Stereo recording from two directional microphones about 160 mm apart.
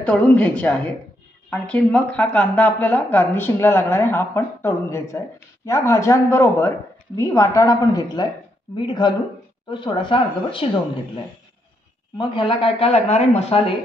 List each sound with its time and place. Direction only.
0.0 s a woman's voice: 10° left (ahead or behind); by 10.7 s 30° left (ahead or behind)
12.2 s speech: 30° left (ahead or behind)